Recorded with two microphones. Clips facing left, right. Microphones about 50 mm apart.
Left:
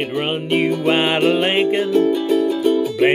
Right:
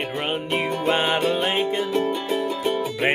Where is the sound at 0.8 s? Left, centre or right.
Left.